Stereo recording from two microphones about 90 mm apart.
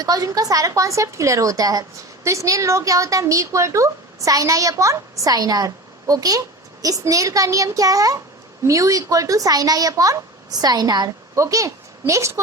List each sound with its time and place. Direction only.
0.0 s a woman's voice: 45° right (ahead or behind)
11.3 s a woman's voice: 35° right (ahead or behind)